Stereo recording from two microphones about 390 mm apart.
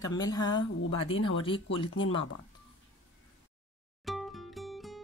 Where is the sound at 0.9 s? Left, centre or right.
Left.